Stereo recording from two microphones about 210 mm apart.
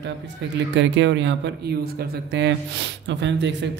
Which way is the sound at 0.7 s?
60° right (ahead or behind).